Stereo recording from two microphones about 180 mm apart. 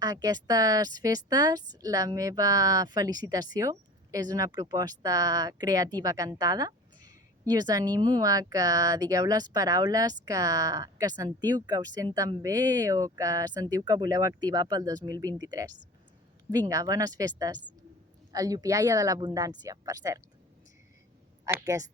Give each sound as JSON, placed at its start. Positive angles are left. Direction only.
{"t": 0.0, "sound": "speech", "side_deg": -20}
{"t": 21.4, "sound": "speech", "side_deg": -20}